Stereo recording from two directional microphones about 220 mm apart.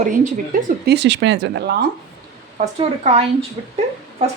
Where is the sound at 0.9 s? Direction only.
50° right (ahead or behind).